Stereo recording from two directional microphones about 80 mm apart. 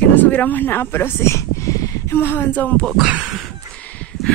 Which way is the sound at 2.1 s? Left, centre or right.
Left.